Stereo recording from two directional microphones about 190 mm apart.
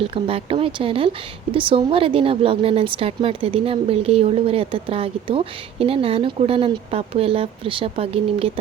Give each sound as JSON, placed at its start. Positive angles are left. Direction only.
{"t": 0.0, "sound": "speech", "side_deg": -30}